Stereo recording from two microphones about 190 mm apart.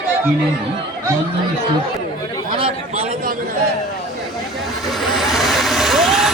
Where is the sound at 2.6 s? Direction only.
30° right (ahead or behind).